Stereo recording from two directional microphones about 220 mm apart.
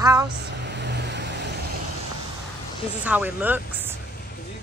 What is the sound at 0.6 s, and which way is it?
Vehicle, 50° right (ahead or behind).